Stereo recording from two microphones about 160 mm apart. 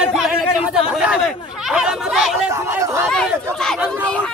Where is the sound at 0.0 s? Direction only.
5° right (ahead or behind).